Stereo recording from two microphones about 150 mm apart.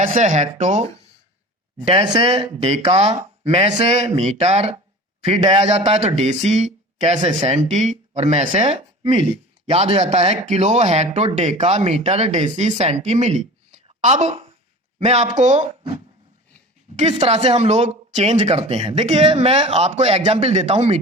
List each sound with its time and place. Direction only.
0.0 s speech: 60° right (ahead or behind)
1.9 s speech: 45° right (ahead or behind)
13.8 s a sound: 50° right (ahead or behind)
14.9 s speech: 45° right (ahead or behind)
17.2 s speech: 45° right (ahead or behind)